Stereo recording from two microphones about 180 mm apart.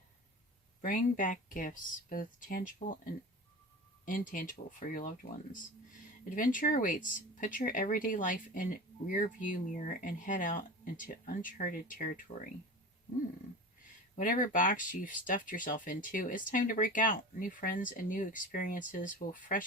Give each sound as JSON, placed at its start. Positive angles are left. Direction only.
{"t": 0.8, "sound": "speech", "side_deg": 50}
{"t": 14.2, "sound": "speech", "side_deg": 50}